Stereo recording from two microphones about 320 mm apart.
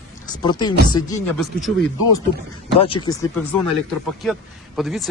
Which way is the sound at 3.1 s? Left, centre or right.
Centre.